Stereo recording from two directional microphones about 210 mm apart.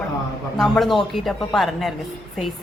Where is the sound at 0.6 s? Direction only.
Centre (ahead or behind).